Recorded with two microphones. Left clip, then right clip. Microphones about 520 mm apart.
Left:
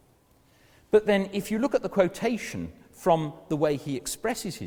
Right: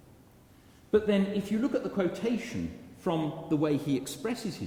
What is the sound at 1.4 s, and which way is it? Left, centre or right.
A man's voice, left.